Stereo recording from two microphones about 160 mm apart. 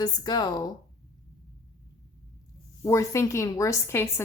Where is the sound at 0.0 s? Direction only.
25° left (ahead or behind).